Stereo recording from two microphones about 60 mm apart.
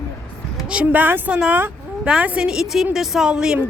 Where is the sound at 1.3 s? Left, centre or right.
Centre.